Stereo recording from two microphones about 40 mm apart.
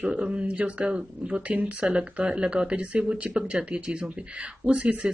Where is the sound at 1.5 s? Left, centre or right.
Right.